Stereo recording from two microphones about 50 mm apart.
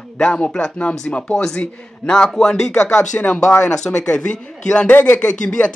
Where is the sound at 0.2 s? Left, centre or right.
Centre.